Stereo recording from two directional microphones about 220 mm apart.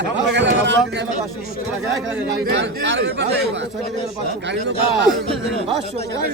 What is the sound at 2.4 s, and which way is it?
Speech, 50° right (ahead or behind).